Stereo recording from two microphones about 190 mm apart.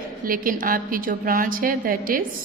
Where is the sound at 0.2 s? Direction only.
50° right (ahead or behind).